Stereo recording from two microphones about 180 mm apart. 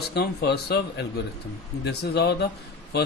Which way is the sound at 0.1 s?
65° left (ahead or behind).